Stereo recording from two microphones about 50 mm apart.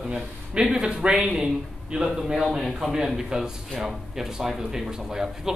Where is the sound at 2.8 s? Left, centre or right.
Centre.